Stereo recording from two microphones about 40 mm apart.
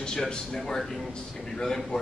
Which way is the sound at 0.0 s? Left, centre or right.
Centre.